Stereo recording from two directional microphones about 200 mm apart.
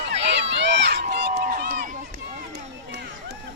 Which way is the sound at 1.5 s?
40° right (ahead or behind).